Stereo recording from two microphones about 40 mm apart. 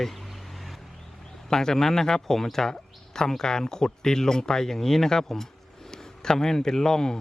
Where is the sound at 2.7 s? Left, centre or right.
Centre.